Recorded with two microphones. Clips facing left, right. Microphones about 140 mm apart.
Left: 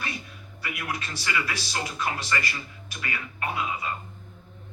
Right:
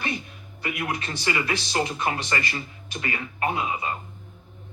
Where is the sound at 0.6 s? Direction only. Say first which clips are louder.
Right 4 dB; 25° right (ahead or behind).